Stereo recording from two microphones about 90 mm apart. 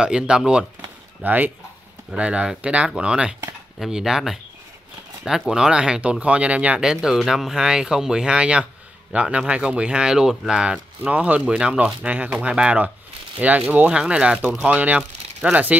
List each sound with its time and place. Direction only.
0.0 s speech: 10° right (ahead or behind)
5.5 s speech: 10° right (ahead or behind)